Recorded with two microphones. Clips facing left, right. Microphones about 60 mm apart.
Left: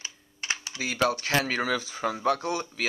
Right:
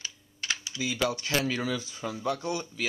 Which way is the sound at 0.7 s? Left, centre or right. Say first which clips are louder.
Left 4 dB; left.